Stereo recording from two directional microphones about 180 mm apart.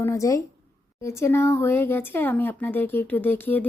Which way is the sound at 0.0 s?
15° left (ahead or behind).